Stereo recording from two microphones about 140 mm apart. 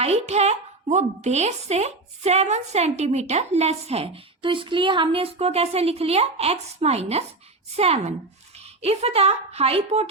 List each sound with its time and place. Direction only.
0.0 s a woman's voice: 50° right (ahead or behind)